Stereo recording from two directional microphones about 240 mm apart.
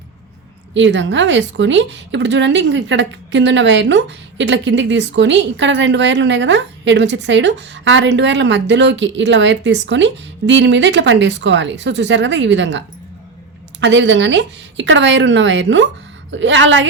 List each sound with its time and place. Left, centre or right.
0.7 s a woman's voice: right
13.8 s a woman's voice: right